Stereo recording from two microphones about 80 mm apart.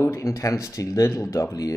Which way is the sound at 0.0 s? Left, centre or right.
Left.